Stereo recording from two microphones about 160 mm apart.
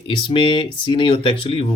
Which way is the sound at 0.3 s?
35° left (ahead or behind).